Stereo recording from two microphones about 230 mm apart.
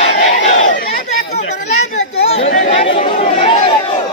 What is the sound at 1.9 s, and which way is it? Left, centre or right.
Chatter, left.